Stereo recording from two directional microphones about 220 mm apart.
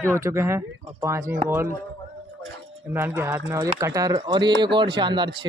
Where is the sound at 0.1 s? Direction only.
10° right (ahead or behind).